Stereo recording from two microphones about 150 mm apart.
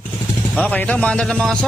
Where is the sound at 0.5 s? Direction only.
10° left (ahead or behind).